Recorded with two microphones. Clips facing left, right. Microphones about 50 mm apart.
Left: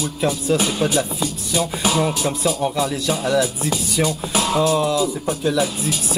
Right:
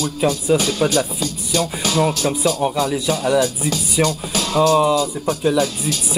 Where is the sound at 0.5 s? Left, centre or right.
Centre.